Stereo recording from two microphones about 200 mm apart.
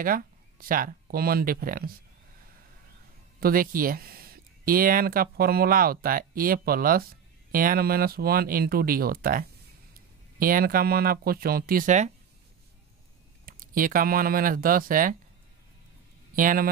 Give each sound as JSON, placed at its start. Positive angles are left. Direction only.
{"t": 0.0, "sound": "speech", "side_deg": -45}
{"t": 3.3, "sound": "speech", "side_deg": -45}
{"t": 13.5, "sound": "speech", "side_deg": -45}
{"t": 16.3, "sound": "speech", "side_deg": -40}